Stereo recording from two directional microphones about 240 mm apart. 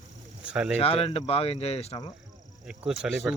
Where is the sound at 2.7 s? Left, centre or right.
Centre.